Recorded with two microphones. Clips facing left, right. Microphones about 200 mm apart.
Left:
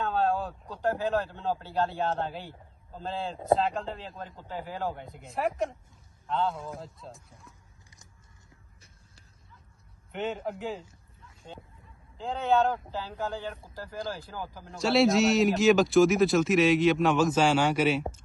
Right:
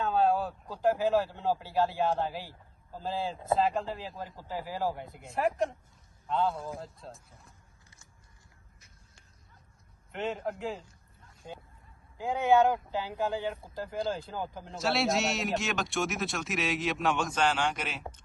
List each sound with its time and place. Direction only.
0.0 s a man's voice: 5° right (ahead or behind)
10.1 s a man's voice: centre (ahead or behind)
12.2 s speech: 15° right (ahead or behind)
14.8 s a man's voice: centre (ahead or behind)